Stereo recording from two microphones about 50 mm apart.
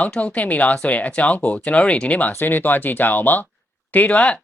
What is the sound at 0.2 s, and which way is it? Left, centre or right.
Speech, left.